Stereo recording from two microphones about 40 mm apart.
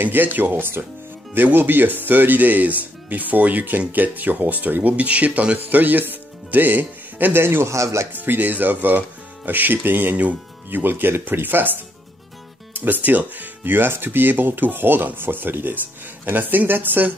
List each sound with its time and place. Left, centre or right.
0.0 s speech: right
5.6 s speech: right
7.3 s a man's voice: right
8.1 s speech: right